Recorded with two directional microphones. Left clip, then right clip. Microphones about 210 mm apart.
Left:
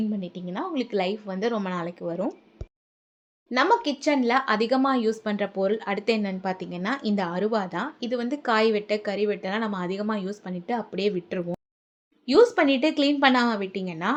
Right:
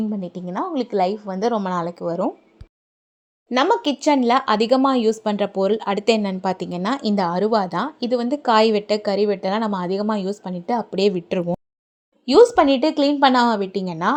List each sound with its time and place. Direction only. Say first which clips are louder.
0.1 s speech: right 5 dB; 20° right (ahead or behind)
3.5 s speech: right 3 dB; 35° right (ahead or behind)